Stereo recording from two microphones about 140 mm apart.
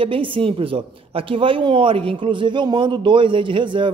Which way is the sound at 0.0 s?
40° right (ahead or behind).